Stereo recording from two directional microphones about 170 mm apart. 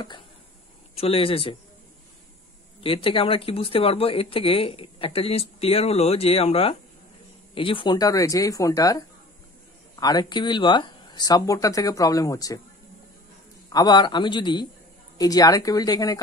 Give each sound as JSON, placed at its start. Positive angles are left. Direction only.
{"t": 0.9, "sound": "speech", "side_deg": 35}
{"t": 2.8, "sound": "speech", "side_deg": 30}
{"t": 13.7, "sound": "speech", "side_deg": 25}